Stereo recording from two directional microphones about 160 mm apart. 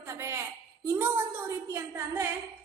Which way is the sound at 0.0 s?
15° right (ahead or behind).